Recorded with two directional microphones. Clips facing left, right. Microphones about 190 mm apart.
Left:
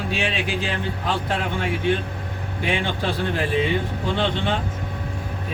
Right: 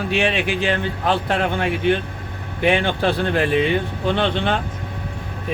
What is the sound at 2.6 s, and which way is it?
Speech, 65° right (ahead or behind).